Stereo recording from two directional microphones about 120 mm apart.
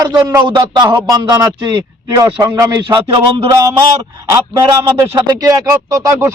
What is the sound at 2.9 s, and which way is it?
Speech, 40° right (ahead or behind).